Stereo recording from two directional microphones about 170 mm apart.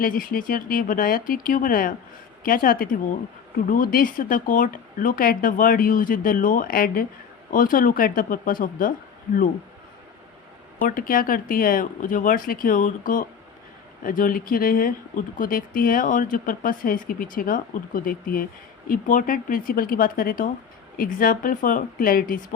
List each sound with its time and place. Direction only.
0.0 s speech: 55° left (ahead or behind)
10.8 s speech: 55° left (ahead or behind)